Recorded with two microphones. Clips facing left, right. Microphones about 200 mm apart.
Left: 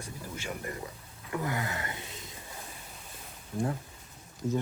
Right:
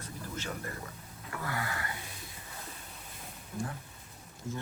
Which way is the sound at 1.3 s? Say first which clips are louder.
Left 4 dB; 20° left (ahead or behind).